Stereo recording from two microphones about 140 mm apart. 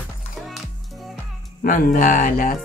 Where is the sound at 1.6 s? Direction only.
75° left (ahead or behind).